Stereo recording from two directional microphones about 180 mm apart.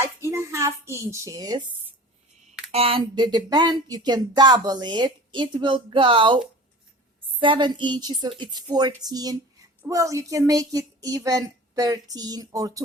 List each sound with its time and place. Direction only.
0.0 s a child's voice: 15° right (ahead or behind)
2.7 s speech: 30° right (ahead or behind)